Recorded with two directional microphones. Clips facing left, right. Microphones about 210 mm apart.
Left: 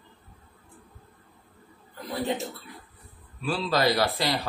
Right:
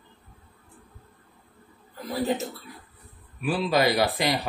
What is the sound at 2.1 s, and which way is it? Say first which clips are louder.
Speech: right 2 dB; centre (ahead or behind).